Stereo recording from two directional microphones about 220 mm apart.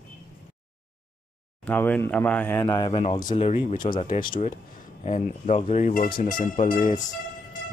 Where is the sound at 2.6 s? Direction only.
20° left (ahead or behind).